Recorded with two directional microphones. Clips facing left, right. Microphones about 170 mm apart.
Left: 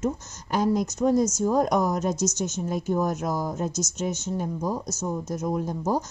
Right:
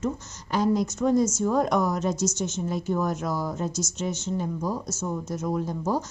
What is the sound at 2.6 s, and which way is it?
Speech, 45° left (ahead or behind).